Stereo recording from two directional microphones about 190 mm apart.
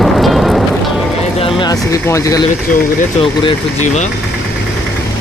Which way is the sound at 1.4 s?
25° left (ahead or behind).